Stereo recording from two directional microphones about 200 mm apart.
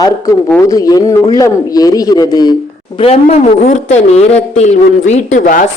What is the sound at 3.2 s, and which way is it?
A man's voice, 35° left (ahead or behind).